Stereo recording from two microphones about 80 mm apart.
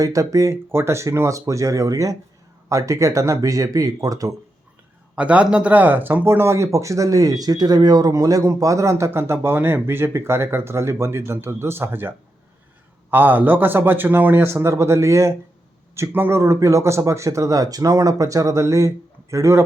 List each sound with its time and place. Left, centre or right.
0.0 s speech: right
5.1 s speech: centre; by 19.6 s right